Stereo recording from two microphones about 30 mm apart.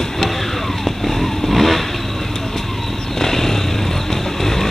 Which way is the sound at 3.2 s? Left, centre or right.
Centre.